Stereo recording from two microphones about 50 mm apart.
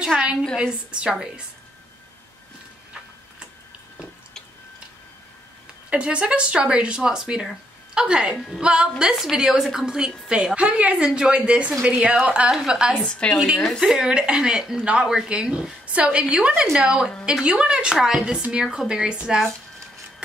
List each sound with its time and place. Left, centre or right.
0.1 s a sound: right
0.6 s speech: centre
5.9 s a woman's voice: right
10.5 s speech: right
12.4 s a woman's voice: centre
13.0 s speech: centre
13.7 s speech: centre
13.9 s a woman's voice: centre
16.7 s a woman's voice: centre
17.5 s speech: centre
17.9 s a woman's voice: centre